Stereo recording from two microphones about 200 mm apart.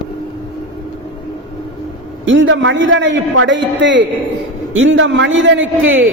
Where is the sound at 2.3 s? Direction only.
70° right (ahead or behind).